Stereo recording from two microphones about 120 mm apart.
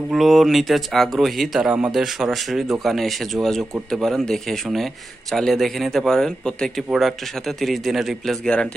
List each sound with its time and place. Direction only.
0.1 s speech: centre (ahead or behind)